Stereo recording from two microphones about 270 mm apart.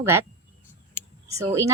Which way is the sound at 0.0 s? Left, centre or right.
Centre.